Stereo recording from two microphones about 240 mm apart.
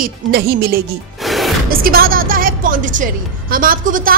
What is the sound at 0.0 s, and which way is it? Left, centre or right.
Speech, right.